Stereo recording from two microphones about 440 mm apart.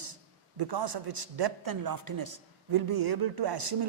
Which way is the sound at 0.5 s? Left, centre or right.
Right.